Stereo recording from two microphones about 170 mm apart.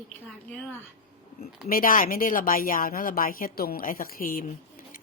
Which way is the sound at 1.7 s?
55° left (ahead or behind).